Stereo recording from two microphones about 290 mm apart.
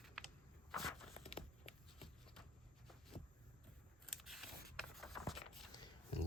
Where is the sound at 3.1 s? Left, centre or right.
Left.